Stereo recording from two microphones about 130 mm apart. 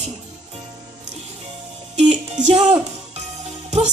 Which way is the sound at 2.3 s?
55° right (ahead or behind).